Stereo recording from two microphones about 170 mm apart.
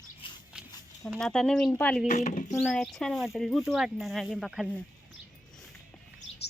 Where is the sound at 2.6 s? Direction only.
5° left (ahead or behind).